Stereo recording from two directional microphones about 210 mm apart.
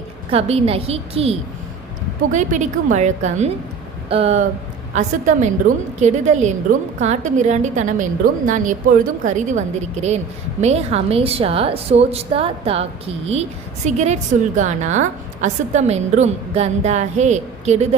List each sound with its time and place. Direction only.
0.3 s a woman's voice: 30° right (ahead or behind)